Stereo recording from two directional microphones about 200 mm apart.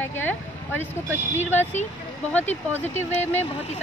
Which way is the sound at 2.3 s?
10° left (ahead or behind).